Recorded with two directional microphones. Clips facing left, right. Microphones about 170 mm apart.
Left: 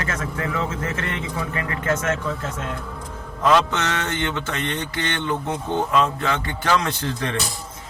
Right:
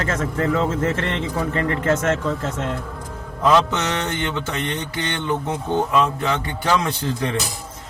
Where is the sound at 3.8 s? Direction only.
15° right (ahead or behind).